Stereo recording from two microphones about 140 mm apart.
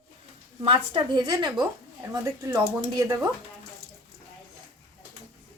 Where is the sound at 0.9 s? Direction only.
30° right (ahead or behind).